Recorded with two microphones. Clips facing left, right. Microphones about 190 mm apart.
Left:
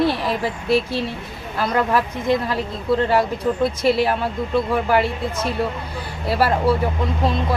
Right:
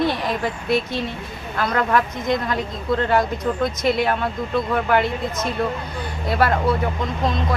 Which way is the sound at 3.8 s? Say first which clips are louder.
Left 2 dB; 30° left (ahead or behind).